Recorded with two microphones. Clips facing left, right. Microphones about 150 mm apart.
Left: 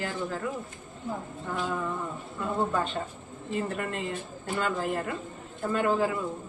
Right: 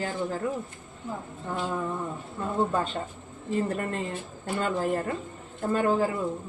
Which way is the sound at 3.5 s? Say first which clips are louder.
Right 3 dB; 35° right (ahead or behind).